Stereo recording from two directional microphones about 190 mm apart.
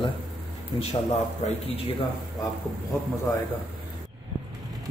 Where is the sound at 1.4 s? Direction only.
35° left (ahead or behind).